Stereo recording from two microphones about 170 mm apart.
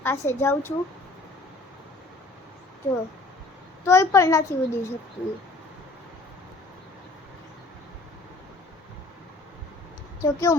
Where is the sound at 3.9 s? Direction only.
15° left (ahead or behind).